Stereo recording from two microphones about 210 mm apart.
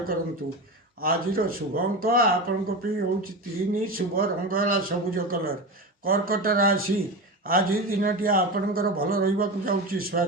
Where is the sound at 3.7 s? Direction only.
45° right (ahead or behind).